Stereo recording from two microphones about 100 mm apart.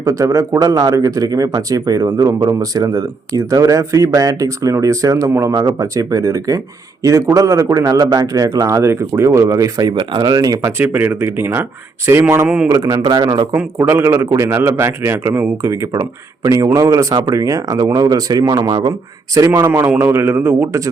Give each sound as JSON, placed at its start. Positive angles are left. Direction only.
{"t": 0.0, "sound": "speech", "side_deg": -30}
{"t": 10.6, "sound": "a man's voice", "side_deg": -20}
{"t": 12.6, "sound": "speech", "side_deg": -35}
{"t": 13.0, "sound": "a man's voice", "side_deg": -45}
{"t": 13.8, "sound": "a man's voice", "side_deg": -25}
{"t": 19.7, "sound": "a man's voice", "side_deg": -20}